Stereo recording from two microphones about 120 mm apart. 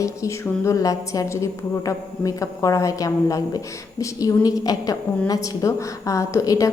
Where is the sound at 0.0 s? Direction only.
25° left (ahead or behind).